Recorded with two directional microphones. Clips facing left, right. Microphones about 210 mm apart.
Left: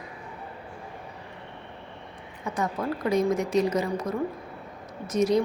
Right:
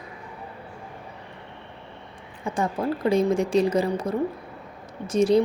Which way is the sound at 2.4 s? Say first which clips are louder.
Right 3 dB; 30° right (ahead or behind).